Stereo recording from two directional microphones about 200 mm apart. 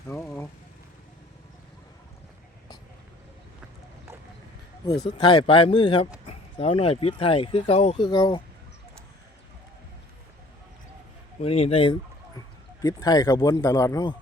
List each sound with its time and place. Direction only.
0.1 s vehicle: centre (ahead or behind)
5.1 s speech: 25° left (ahead or behind)
11.3 s speech: 30° left (ahead or behind)